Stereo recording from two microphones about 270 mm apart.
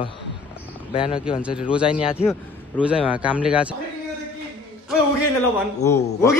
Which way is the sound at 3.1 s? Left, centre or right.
Centre.